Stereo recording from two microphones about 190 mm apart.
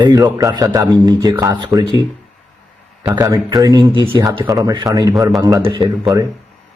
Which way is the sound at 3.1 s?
20° right (ahead or behind).